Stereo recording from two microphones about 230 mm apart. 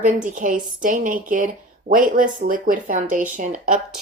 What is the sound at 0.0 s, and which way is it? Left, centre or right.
A woman's voice, right.